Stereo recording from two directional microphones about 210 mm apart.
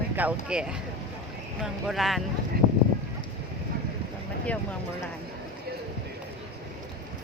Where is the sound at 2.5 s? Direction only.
45° right (ahead or behind).